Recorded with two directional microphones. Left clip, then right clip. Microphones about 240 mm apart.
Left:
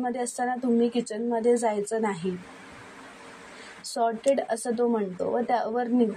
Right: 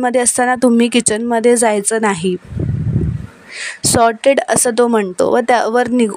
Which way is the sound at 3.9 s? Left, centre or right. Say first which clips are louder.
Right 13 dB; right.